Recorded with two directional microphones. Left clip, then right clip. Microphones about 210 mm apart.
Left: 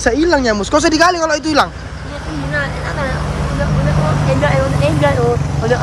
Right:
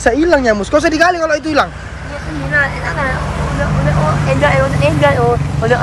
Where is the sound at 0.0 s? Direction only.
Centre (ahead or behind).